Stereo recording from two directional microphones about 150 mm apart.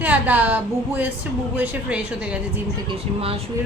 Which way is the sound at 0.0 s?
10° right (ahead or behind).